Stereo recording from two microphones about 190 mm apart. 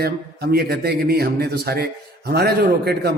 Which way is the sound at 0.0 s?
55° right (ahead or behind).